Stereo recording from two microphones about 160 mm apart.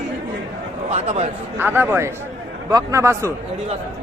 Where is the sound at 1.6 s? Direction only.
10° right (ahead or behind).